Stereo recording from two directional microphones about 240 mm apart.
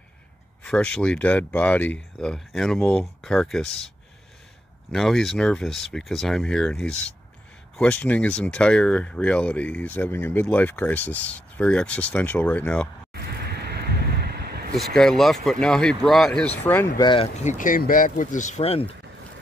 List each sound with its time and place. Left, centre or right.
0.7 s speech: centre
4.9 s speech: centre
13.1 s a sound: right
15.0 s speech: centre
16.6 s speech: centre